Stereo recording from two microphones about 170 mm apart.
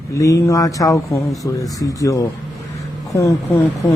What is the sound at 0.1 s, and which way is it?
Speech, 20° left (ahead or behind).